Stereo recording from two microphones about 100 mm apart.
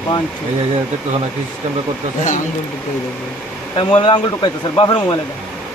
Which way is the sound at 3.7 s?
55° left (ahead or behind).